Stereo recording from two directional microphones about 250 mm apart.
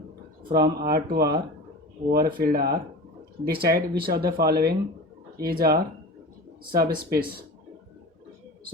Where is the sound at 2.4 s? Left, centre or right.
Right.